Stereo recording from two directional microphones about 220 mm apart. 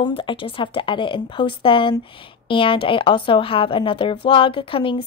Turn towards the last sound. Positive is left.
turn(degrees=25)  # may be behind; listen again after turning